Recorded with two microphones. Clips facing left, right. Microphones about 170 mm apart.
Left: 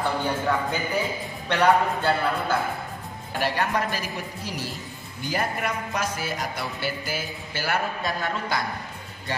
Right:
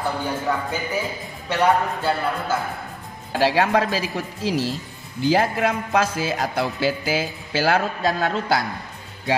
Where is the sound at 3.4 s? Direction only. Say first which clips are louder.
Right 7 dB; 90° right.